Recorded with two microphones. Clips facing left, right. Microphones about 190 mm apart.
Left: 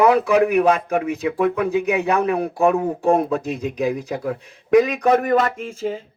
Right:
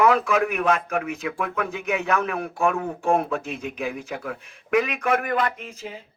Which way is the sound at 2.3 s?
35° left (ahead or behind).